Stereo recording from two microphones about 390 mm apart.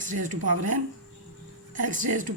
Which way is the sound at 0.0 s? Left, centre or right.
Centre.